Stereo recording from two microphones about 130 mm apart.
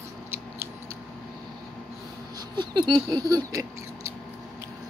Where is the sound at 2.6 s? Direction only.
35° right (ahead or behind).